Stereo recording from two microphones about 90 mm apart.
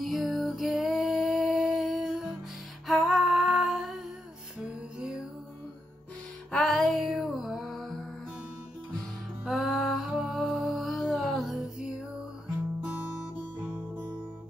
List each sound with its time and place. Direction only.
0.0 s music: centre (ahead or behind)
2.9 s humming: centre (ahead or behind)
4.6 s music: 10° right (ahead or behind)
6.5 s music: 5° left (ahead or behind)
9.5 s music: centre (ahead or behind)